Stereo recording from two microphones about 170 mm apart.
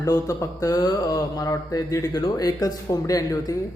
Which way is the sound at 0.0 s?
20° left (ahead or behind).